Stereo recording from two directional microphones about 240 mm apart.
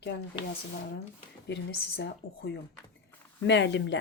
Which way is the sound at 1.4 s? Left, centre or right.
Left.